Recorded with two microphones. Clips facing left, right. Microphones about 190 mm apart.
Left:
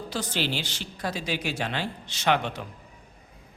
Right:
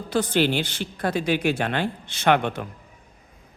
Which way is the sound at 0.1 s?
55° right (ahead or behind).